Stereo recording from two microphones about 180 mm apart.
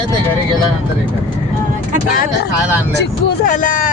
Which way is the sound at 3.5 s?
45° left (ahead or behind).